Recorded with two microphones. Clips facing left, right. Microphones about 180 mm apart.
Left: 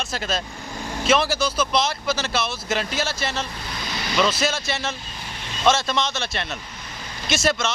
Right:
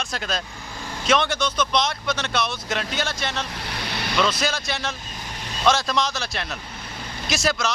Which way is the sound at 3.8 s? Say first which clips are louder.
Even; 60° right (ahead or behind).